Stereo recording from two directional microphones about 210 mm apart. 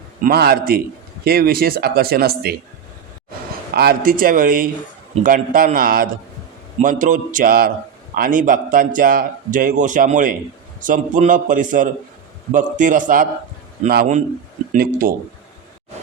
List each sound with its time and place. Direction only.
0.2 s speech: 45° right (ahead or behind)
3.8 s a man's voice: 45° right (ahead or behind)